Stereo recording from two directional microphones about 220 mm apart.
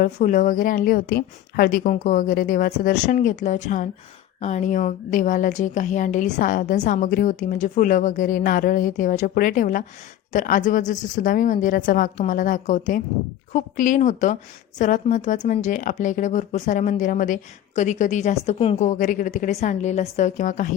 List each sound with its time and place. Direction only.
0.0 s speech: 35° left (ahead or behind)